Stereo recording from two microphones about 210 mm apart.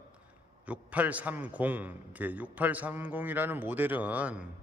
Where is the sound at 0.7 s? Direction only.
5° right (ahead or behind).